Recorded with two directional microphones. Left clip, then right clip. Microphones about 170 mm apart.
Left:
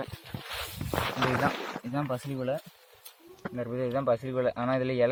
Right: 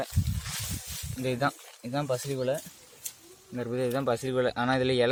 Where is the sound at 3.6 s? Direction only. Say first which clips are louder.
Right 1 dB; 90° right.